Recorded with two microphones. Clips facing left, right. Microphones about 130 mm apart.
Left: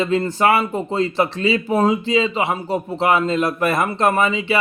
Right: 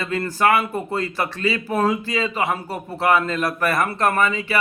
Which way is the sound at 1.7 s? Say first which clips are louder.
Left 4 dB; 15° left (ahead or behind).